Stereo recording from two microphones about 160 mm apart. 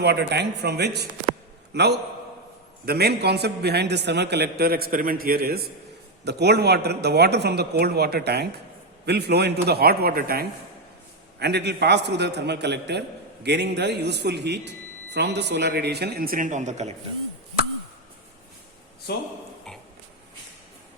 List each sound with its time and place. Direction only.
0.0 s a man's voice: 90° right; by 5.7 s 75° right (ahead or behind)
6.2 s a man's voice: 90° right; by 10.4 s 70° right (ahead or behind)
11.3 s a man's voice: 90° right; by 16.9 s 45° right (ahead or behind)
19.1 s speech: 80° left